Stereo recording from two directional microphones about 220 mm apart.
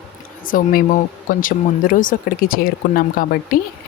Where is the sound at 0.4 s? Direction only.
40° left (ahead or behind).